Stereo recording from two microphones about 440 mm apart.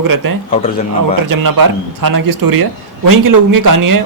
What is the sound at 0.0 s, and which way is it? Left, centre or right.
A man's voice, right.